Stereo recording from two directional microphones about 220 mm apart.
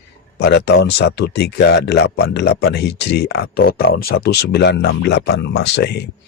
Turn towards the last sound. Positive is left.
turn(degrees=50)  # may be behind; listen again after turning